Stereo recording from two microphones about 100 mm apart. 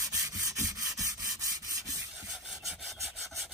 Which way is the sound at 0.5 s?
30° right (ahead or behind).